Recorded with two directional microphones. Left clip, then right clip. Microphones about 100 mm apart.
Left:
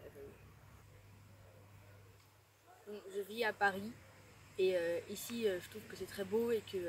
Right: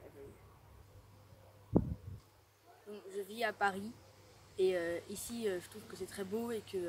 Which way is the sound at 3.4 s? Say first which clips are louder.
Even; 25° right (ahead or behind).